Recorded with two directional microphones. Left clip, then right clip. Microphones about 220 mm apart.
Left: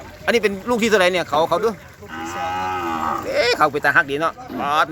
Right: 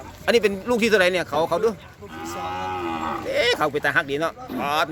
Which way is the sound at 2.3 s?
20° left (ahead or behind).